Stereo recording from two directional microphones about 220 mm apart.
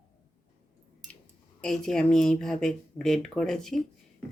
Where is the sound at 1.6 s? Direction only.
5° left (ahead or behind).